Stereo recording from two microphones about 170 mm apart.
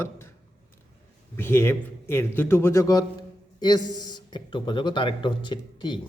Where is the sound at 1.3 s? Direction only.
15° left (ahead or behind).